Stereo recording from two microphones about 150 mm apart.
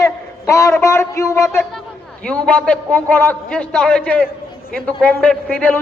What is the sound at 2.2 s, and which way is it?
Speech, 5° left (ahead or behind).